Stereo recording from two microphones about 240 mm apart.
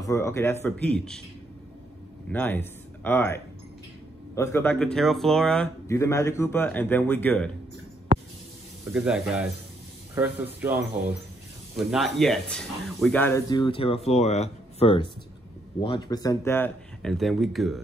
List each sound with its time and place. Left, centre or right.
0.0 s speech: centre
2.3 s speech: centre
8.9 s speech: centre